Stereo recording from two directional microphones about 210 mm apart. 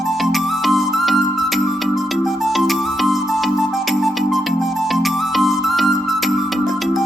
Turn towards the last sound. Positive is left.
turn(degrees=0)  # may be behind; listen again after turning